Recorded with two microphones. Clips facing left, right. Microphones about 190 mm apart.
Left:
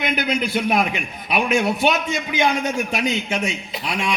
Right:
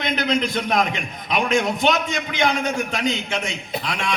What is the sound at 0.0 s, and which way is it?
A man's voice, 10° left (ahead or behind).